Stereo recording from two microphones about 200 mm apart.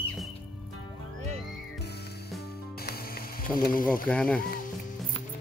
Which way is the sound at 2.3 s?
50° left (ahead or behind).